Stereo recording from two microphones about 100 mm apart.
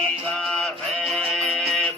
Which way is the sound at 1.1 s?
5° left (ahead or behind).